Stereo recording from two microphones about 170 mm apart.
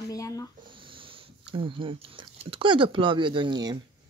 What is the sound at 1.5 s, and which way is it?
Speech, 30° right (ahead or behind).